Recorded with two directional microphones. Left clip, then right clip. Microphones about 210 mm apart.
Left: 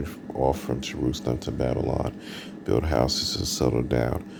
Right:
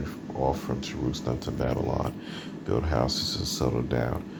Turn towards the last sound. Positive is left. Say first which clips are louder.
# left 4 dB
turn(degrees=55)  # may be behind; listen again after turning